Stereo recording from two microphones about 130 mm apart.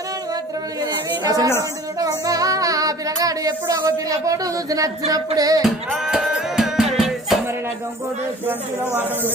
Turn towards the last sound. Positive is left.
turn(degrees=0)  # may be behind; listen again after turning